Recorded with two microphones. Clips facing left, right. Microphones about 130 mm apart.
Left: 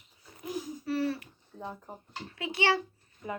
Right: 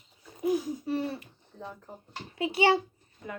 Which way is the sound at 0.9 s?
20° right (ahead or behind).